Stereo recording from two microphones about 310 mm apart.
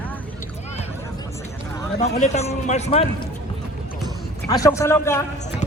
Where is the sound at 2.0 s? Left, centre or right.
Left.